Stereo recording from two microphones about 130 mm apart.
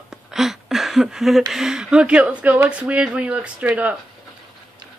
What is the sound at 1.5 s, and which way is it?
Speech, 5° right (ahead or behind).